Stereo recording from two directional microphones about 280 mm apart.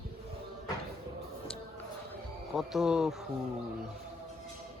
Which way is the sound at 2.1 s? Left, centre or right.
Centre.